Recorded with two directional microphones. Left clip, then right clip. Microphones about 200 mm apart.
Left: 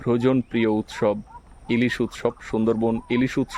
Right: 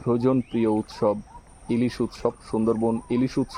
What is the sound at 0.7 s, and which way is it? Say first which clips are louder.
Speech: even; 25° left (ahead or behind).